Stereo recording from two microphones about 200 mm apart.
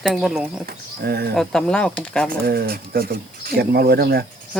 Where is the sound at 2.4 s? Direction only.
50° right (ahead or behind).